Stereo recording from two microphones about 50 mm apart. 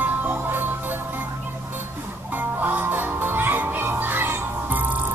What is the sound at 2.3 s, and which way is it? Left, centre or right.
Music, right.